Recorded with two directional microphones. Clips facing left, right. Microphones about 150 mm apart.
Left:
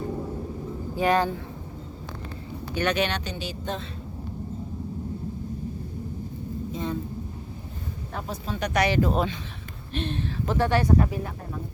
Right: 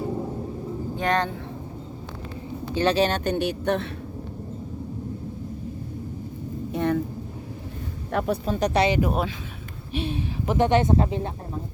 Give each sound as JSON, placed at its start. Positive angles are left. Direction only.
{"t": 0.9, "sound": "speech", "side_deg": 5}
{"t": 2.7, "sound": "speech", "side_deg": -30}
{"t": 6.7, "sound": "vehicle", "side_deg": -65}
{"t": 8.1, "sound": "speech", "side_deg": -75}
{"t": 8.4, "sound": "speech", "side_deg": -40}
{"t": 8.8, "sound": "speech", "side_deg": -15}